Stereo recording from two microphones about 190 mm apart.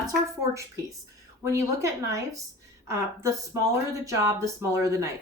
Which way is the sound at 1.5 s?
15° right (ahead or behind).